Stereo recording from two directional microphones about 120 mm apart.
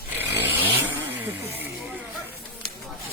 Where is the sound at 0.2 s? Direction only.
15° right (ahead or behind).